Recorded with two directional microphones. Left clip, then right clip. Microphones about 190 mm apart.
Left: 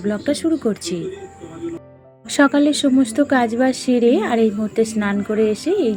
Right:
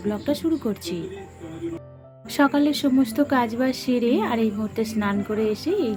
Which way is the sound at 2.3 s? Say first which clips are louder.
Left 5 dB; 25° left (ahead or behind).